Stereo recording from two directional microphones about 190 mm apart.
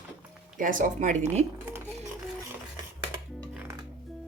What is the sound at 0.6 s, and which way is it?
Speech, 45° right (ahead or behind).